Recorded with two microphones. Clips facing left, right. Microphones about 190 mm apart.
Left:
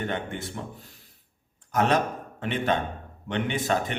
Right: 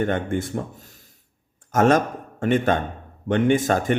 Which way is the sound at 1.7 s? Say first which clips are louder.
Right 6 dB; 45° right (ahead or behind).